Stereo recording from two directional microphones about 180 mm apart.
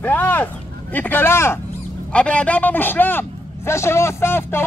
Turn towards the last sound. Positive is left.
turn(degrees=15)  # may be behind; listen again after turning